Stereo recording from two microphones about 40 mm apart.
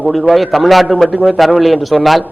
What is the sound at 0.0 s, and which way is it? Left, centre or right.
A man's voice, centre.